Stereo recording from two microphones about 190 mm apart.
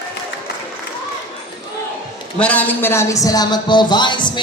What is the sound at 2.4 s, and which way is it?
Speech, 10° left (ahead or behind).